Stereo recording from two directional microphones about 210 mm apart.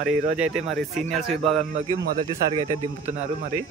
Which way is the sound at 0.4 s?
Centre (ahead or behind).